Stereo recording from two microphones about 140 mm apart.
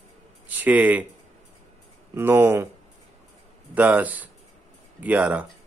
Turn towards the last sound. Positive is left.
turn(degrees=-10)  # may be behind; listen again after turning